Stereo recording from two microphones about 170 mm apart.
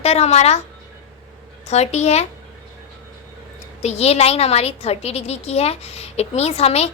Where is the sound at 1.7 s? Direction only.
40° left (ahead or behind).